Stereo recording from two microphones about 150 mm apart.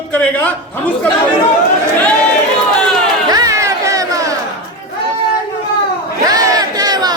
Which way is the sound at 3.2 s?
25° right (ahead or behind).